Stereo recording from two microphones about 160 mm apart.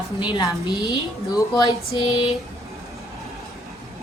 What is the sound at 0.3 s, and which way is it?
Speech, 25° left (ahead or behind).